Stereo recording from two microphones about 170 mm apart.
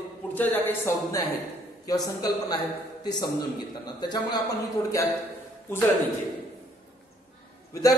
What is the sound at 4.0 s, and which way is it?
A man's voice, 25° left (ahead or behind).